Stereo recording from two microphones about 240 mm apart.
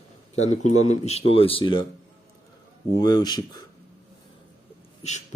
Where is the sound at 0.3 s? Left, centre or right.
Left.